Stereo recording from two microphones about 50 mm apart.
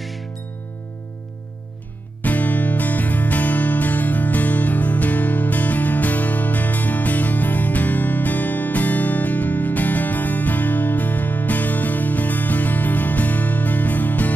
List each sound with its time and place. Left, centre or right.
2.2 s music: left